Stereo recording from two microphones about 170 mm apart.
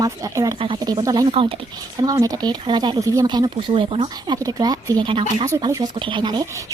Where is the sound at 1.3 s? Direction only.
35° right (ahead or behind).